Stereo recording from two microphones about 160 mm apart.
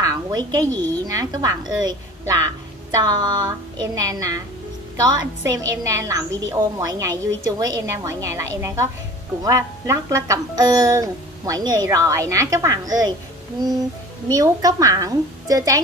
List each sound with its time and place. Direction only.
0.0 s a sound: 25° right (ahead or behind)
1.0 s a woman's voice: 20° right (ahead or behind)
14.3 s a woman's voice: 20° right (ahead or behind)